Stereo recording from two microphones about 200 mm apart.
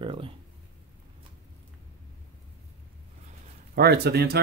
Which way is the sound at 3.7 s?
55° right (ahead or behind).